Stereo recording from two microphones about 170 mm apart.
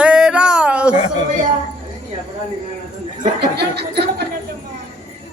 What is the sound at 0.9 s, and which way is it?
Speech, 40° left (ahead or behind).